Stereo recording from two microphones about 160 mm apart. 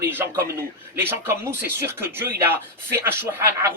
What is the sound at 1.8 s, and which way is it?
Speech, 15° right (ahead or behind).